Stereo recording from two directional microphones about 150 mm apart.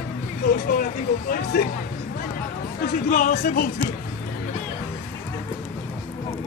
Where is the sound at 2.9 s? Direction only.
60° left (ahead or behind).